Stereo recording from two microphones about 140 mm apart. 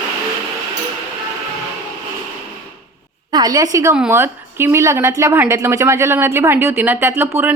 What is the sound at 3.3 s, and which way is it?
A woman's voice, 25° right (ahead or behind).